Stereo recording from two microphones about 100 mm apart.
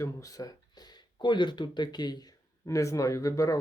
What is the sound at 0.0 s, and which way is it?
Speech, 35° left (ahead or behind).